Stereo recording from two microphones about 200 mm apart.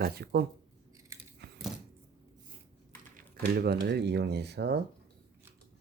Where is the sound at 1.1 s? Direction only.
15° right (ahead or behind).